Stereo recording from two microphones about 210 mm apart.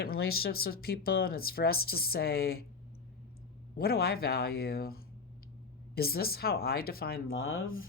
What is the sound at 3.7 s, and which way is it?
Speech, 45° left (ahead or behind).